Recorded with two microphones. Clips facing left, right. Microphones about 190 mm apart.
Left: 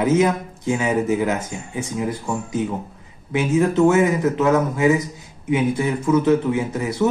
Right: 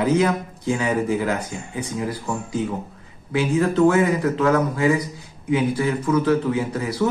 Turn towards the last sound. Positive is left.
turn(degrees=25)  # may be behind; listen again after turning